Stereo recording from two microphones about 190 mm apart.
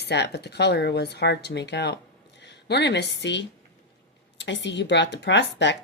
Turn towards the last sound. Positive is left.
turn(degrees=65)  # may be behind; listen again after turning